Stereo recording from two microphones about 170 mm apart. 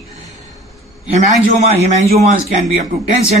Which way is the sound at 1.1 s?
50° right (ahead or behind).